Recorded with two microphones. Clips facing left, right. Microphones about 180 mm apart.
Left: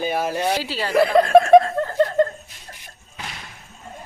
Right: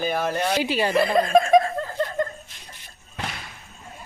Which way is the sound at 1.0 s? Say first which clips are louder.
Left 6 dB; 70° left (ahead or behind).